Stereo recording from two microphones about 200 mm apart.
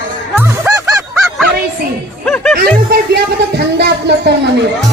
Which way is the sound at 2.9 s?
55° right (ahead or behind).